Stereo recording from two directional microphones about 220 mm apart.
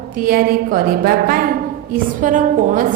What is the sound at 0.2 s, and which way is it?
A woman's voice, 40° right (ahead or behind).